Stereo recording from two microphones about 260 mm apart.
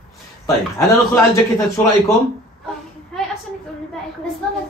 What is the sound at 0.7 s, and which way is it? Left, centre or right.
Speech, centre.